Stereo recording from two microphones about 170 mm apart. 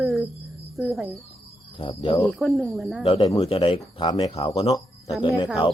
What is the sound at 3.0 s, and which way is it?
Speech, 35° left (ahead or behind).